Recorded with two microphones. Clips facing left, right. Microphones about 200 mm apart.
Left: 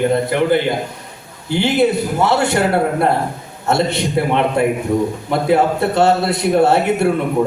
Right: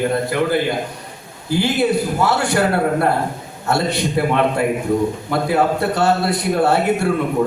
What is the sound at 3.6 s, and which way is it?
A man's voice, 20° left (ahead or behind).